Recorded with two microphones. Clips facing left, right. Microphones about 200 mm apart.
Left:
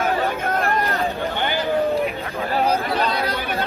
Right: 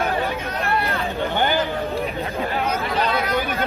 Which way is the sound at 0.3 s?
50° left (ahead or behind).